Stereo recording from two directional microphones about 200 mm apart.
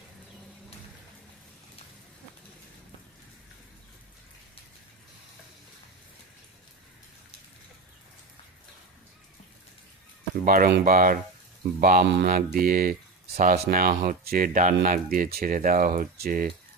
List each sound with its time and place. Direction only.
10.4 s speech: 45° right (ahead or behind)